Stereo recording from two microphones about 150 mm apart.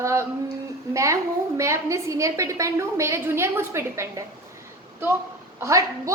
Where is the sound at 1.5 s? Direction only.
20° right (ahead or behind).